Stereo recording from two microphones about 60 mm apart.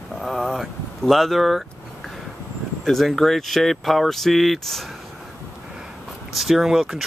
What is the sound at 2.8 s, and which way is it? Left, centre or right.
Speech, centre.